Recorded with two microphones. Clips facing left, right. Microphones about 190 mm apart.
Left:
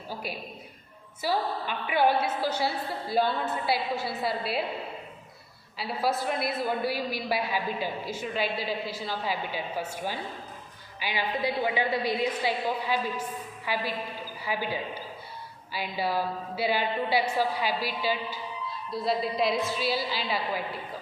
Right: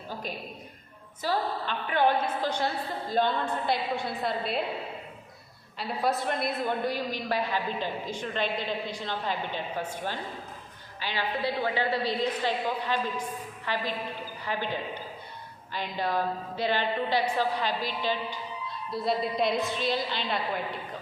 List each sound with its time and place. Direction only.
0.1 s a woman's voice: 10° left (ahead or behind)
5.7 s a woman's voice: 5° left (ahead or behind)